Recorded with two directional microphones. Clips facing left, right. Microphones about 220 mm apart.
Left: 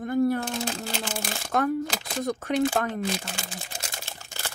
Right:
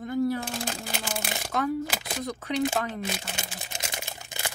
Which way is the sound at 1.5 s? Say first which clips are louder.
Left 3 dB; 50° left (ahead or behind).